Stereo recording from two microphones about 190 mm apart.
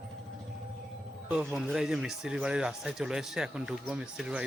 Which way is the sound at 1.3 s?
5° right (ahead or behind).